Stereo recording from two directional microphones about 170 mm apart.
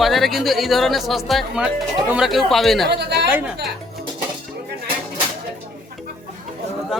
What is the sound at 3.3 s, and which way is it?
Speech, 10° right (ahead or behind).